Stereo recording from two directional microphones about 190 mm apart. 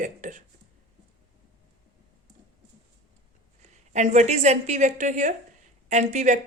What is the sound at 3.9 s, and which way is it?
Speech, 40° right (ahead or behind).